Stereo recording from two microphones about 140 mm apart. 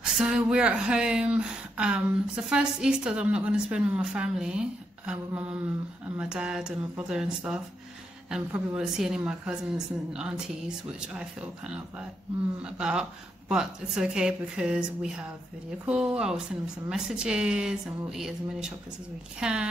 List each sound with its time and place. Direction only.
0.0 s a woman's voice: 5° right (ahead or behind)